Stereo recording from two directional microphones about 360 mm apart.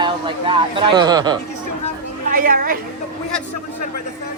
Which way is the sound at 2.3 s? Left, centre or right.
Right.